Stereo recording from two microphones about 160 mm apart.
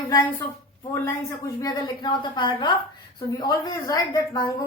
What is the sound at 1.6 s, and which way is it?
A woman's voice, 25° left (ahead or behind).